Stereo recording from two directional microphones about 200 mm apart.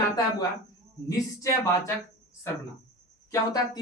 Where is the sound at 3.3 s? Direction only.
20° left (ahead or behind).